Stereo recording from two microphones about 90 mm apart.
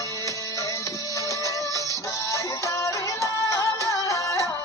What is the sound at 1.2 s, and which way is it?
Music, 35° left (ahead or behind).